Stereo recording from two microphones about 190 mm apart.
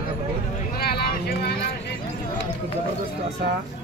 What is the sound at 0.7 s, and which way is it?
Vehicle, 55° left (ahead or behind).